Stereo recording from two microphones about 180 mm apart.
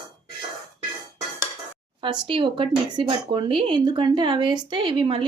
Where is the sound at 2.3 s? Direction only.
30° right (ahead or behind).